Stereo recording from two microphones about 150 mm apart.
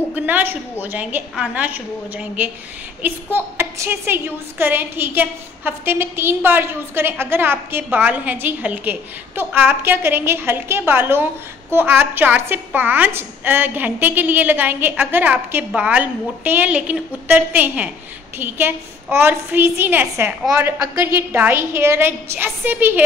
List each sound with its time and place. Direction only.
0.1 s a woman's voice: 10° right (ahead or behind)